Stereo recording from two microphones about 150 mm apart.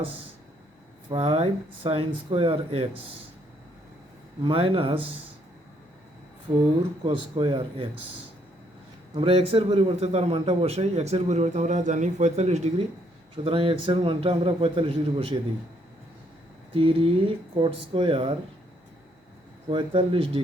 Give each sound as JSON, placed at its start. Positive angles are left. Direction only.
{"t": 1.1, "sound": "a man's voice", "side_deg": -40}
{"t": 4.4, "sound": "a man's voice", "side_deg": -40}
{"t": 7.0, "sound": "a man's voice", "side_deg": -35}
{"t": 9.1, "sound": "a man's voice", "side_deg": -40}
{"t": 13.3, "sound": "a man's voice", "side_deg": -35}
{"t": 16.7, "sound": "a man's voice", "side_deg": -35}
{"t": 19.7, "sound": "a man's voice", "side_deg": -35}